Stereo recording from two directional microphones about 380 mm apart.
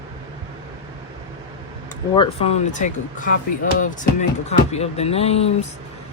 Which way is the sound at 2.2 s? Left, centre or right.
Centre.